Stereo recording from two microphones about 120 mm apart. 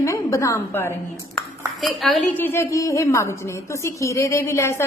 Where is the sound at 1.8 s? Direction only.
Centre (ahead or behind).